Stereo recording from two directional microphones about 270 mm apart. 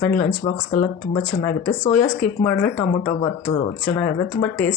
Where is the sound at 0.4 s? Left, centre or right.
Left.